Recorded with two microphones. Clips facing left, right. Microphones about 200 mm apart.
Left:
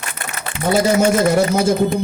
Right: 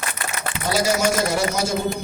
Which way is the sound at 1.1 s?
55° left (ahead or behind).